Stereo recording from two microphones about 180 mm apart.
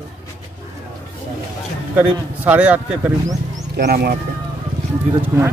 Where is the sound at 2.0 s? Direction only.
10° right (ahead or behind).